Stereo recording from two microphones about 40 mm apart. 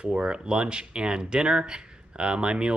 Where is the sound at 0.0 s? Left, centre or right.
Right.